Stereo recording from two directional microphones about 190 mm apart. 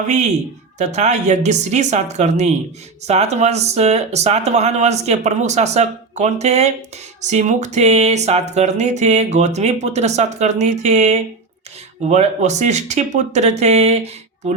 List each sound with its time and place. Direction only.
0.8 s speech: 35° right (ahead or behind)